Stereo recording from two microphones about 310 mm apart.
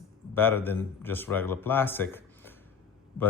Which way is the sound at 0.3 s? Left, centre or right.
Centre.